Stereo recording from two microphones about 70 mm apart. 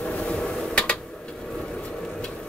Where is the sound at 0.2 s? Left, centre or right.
Centre.